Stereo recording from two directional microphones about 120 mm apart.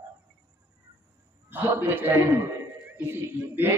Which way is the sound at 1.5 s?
15° right (ahead or behind).